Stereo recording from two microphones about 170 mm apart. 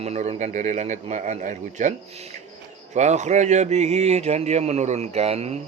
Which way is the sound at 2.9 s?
45° right (ahead or behind).